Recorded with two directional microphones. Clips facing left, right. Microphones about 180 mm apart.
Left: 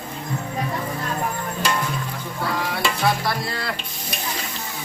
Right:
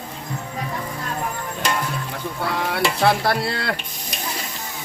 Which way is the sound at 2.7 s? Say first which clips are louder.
Right 5 dB; 65° right (ahead or behind).